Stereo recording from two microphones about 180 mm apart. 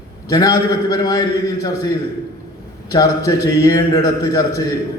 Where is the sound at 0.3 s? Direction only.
20° left (ahead or behind).